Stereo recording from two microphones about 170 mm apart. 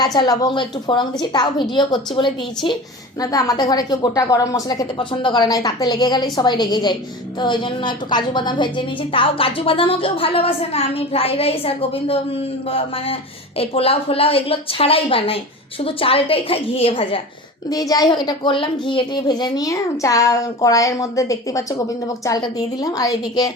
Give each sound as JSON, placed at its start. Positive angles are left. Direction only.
{"t": 0.0, "sound": "a woman's voice", "side_deg": 25}
{"t": 17.7, "sound": "a woman's voice", "side_deg": 20}